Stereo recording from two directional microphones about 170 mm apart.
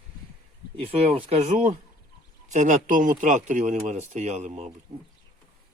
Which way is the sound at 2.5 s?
45° right (ahead or behind).